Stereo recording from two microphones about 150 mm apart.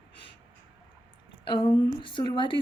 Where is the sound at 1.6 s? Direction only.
35° left (ahead or behind).